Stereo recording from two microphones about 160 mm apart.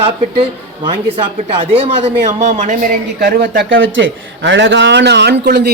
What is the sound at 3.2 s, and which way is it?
A man's voice, 90° right.